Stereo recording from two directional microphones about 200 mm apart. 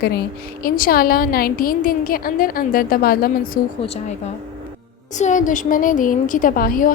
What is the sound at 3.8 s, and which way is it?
Speech, 30° left (ahead or behind).